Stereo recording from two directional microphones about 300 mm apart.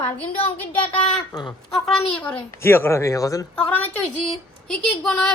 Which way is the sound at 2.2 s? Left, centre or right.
Centre.